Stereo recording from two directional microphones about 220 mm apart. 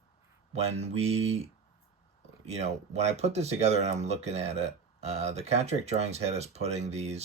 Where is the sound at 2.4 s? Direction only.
30° right (ahead or behind).